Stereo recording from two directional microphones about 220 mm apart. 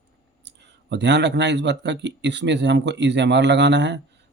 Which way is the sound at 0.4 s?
50° right (ahead or behind).